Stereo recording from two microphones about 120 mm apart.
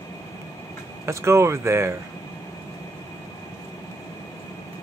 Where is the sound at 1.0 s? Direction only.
25° right (ahead or behind).